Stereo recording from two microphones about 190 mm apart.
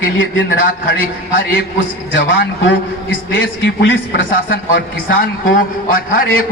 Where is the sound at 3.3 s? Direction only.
80° left.